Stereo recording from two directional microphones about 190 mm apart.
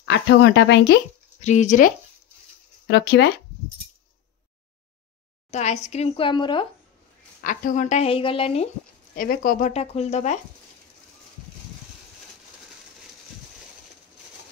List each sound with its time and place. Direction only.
0.0 s speech: 70° left (ahead or behind)
1.4 s a woman's voice: 40° left (ahead or behind)
2.9 s speech: 65° left (ahead or behind)
5.5 s a woman's voice: 35° left (ahead or behind)
7.4 s a woman's voice: 45° left (ahead or behind)
9.1 s speech: 50° left (ahead or behind)
9.7 s a woman's voice: 35° left (ahead or behind)